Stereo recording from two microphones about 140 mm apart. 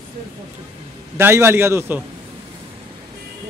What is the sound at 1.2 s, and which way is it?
Speech, 15° right (ahead or behind).